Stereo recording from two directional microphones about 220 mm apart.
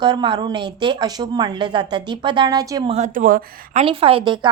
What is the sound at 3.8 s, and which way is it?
Speech, 25° right (ahead or behind).